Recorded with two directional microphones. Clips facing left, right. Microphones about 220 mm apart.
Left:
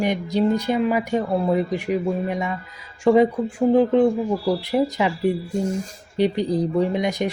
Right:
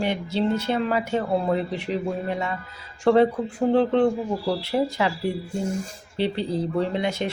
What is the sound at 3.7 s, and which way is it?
Speech, 10° left (ahead or behind).